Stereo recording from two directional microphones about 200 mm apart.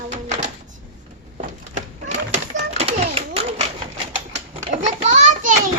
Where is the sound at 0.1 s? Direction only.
35° right (ahead or behind).